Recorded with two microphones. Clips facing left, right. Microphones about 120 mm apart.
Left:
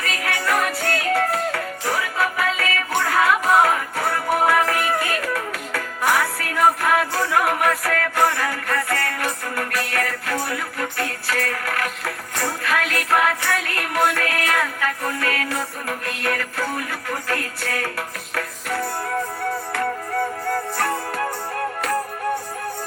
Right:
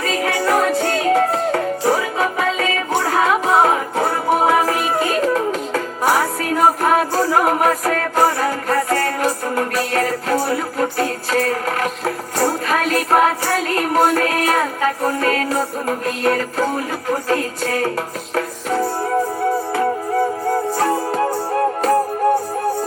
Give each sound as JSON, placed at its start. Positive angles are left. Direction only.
{"t": 0.0, "sound": "music", "side_deg": -30}
{"t": 20.5, "sound": "music", "side_deg": -20}